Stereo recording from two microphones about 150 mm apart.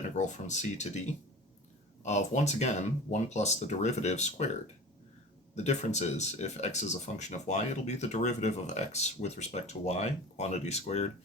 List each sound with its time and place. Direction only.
0.2 s speech: 50° left (ahead or behind)